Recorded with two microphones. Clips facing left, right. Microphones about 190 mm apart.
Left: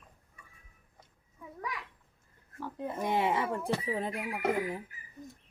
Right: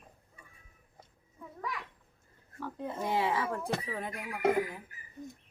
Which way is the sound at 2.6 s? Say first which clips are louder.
Left 1 dB; 10° left (ahead or behind).